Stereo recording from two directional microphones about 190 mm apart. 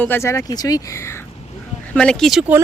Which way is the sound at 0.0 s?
10° left (ahead or behind).